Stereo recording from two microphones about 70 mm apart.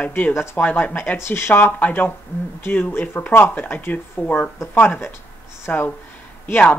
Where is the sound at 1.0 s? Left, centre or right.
Left.